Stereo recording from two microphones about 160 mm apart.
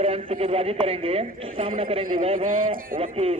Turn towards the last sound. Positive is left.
turn(degrees=-40)  # may be behind; listen again after turning